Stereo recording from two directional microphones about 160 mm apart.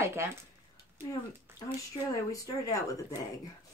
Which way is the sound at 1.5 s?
15° right (ahead or behind).